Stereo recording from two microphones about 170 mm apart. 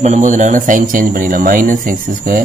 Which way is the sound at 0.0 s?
45° right (ahead or behind).